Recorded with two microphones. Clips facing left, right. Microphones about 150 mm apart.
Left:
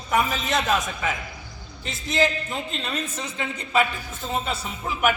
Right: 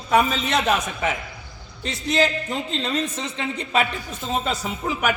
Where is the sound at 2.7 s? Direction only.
30° right (ahead or behind).